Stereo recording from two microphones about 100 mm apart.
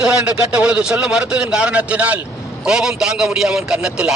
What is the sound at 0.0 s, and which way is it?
A man's voice, 10° right (ahead or behind).